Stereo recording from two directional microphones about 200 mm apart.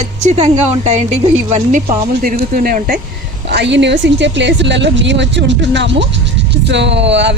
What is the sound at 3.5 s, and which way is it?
Speech, 60° right (ahead or behind).